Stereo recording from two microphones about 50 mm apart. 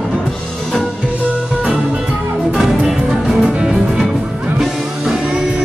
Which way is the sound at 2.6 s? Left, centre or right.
Centre.